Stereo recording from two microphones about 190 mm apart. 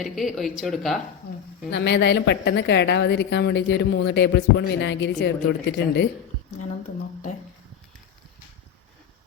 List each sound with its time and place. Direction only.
0.0 s speech: centre (ahead or behind)
1.7 s a woman's voice: 65° left (ahead or behind)